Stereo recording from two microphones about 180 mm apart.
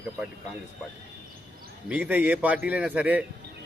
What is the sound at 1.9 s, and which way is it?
A man's voice, 10° right (ahead or behind).